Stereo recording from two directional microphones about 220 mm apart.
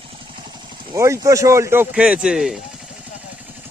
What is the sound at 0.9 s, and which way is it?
Speech, 15° right (ahead or behind).